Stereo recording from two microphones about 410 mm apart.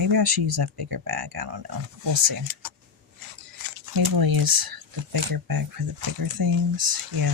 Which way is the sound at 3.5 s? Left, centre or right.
Right.